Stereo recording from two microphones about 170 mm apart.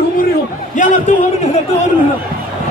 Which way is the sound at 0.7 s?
45° left (ahead or behind).